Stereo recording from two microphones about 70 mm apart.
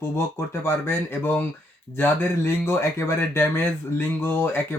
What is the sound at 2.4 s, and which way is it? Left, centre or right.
Speech, left.